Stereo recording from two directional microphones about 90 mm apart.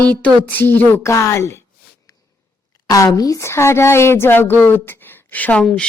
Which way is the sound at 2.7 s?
40° left (ahead or behind).